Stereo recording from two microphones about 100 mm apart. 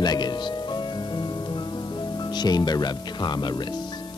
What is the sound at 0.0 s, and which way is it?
Music, 45° left (ahead or behind).